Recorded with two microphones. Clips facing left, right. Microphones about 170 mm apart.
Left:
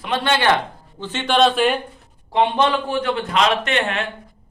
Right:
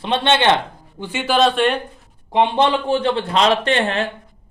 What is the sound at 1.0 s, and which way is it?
Speech, 10° right (ahead or behind).